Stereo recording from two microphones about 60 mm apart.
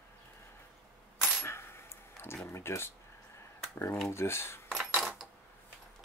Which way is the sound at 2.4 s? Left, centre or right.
Left.